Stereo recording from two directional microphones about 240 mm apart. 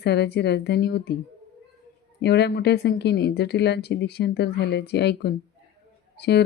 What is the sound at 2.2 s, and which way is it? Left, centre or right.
Speech, left.